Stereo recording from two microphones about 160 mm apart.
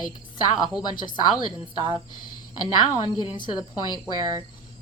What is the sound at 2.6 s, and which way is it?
A woman's voice, 25° left (ahead or behind).